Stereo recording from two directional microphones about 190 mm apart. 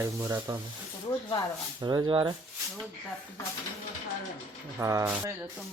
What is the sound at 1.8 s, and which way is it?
Speech, 20° right (ahead or behind).